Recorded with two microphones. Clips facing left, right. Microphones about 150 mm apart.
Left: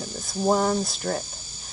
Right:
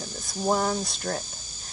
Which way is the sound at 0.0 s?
10° left (ahead or behind).